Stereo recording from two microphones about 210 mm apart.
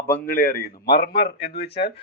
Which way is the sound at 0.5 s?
45° left (ahead or behind).